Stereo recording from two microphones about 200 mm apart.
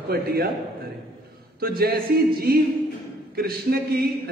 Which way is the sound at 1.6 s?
50° right (ahead or behind).